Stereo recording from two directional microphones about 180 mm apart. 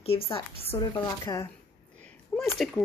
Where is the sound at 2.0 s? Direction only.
5° left (ahead or behind).